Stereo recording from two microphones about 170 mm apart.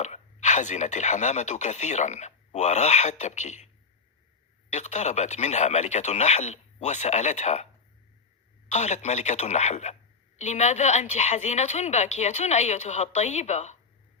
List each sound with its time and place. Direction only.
0.0 s speech: 45° left (ahead or behind)
4.7 s speech: 40° left (ahead or behind)
8.7 s a woman's voice: 45° left (ahead or behind)